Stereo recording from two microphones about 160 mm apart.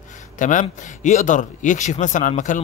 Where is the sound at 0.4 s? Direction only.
50° left (ahead or behind).